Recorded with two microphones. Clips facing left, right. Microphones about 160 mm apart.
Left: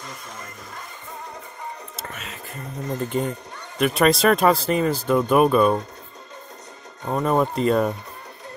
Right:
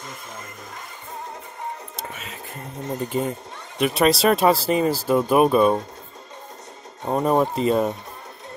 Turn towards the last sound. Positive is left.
turn(degrees=0)  # may be behind; listen again after turning